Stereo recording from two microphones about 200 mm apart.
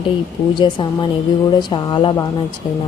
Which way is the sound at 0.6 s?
25° left (ahead or behind).